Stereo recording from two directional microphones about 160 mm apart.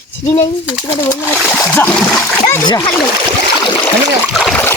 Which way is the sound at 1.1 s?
15° left (ahead or behind).